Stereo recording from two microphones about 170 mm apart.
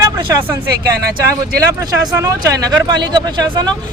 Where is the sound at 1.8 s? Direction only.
20° right (ahead or behind).